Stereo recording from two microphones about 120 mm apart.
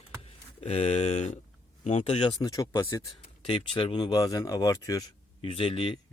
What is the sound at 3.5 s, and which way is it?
Speech, 45° left (ahead or behind).